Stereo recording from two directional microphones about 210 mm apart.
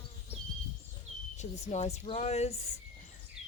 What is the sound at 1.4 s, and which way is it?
Speech, 35° left (ahead or behind).